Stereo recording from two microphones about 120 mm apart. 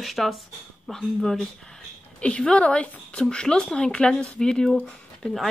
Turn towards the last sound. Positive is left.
turn(degrees=5)  # may be behind; listen again after turning